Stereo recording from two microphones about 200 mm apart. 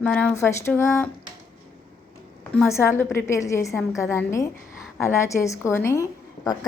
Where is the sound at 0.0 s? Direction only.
5° left (ahead or behind).